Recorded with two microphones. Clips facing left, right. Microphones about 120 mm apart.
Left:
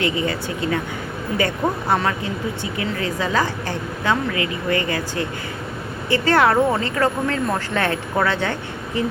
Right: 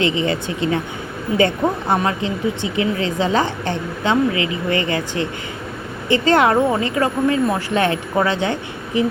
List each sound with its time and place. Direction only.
0.0 s a woman's voice: 25° right (ahead or behind)
1.9 s a woman's voice: 20° right (ahead or behind)